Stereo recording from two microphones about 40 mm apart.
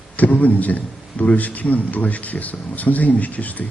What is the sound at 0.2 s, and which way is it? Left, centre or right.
A man's voice, left.